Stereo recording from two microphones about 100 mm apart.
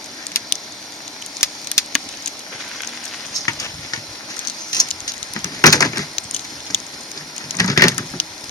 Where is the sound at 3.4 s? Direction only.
35° left (ahead or behind).